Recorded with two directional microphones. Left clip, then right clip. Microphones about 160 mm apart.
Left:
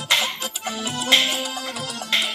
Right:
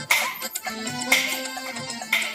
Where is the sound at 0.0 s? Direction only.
35° left (ahead or behind).